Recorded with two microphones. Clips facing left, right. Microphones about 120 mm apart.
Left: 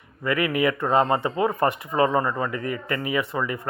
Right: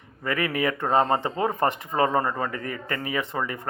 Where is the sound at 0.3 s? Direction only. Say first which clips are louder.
Left 3 dB; 35° right (ahead or behind).